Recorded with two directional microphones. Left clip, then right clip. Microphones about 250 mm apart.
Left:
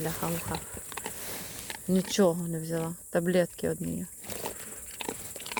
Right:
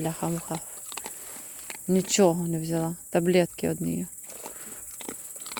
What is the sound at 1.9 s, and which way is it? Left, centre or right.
Speech, right.